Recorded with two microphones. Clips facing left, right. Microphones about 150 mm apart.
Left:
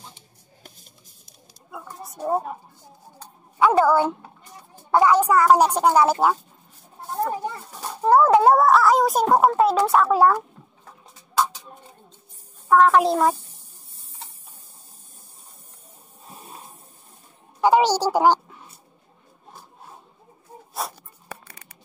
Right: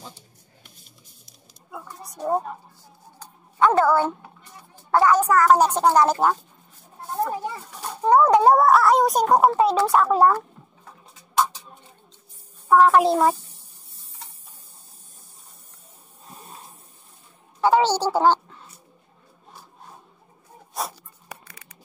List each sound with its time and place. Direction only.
2.0 s a child's voice: 5° left (ahead or behind)
3.5 s a woman's voice: 10° left (ahead or behind)
7.1 s a child's voice: centre (ahead or behind)
12.6 s a child's voice: 5° right (ahead or behind)
17.6 s a sound: 15° left (ahead or behind)